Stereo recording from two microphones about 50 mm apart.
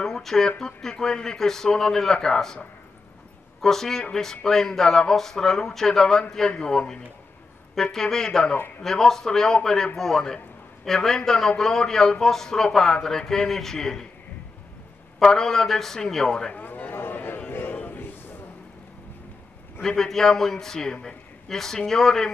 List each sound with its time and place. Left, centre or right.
0.0 s a sound: centre
0.5 s a man's voice: centre
3.6 s a man's voice: centre
8.5 s speech: left
8.8 s a man's voice: centre
15.1 s a man's voice: centre
16.5 s a sound: left
19.8 s a man's voice: centre